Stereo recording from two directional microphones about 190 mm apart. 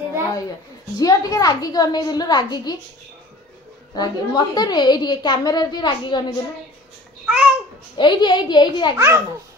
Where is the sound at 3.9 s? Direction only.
20° left (ahead or behind).